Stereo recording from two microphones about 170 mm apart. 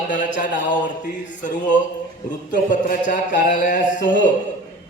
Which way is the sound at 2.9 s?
50° left (ahead or behind).